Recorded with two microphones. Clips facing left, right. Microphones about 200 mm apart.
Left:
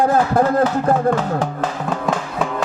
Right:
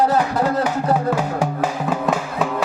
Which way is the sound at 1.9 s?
Centre (ahead or behind).